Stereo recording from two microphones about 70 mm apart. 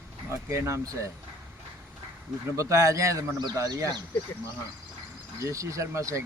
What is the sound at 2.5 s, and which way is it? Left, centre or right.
Speech, right.